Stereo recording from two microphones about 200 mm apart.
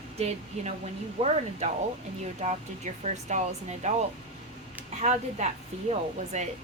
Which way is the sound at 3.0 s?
35° right (ahead or behind).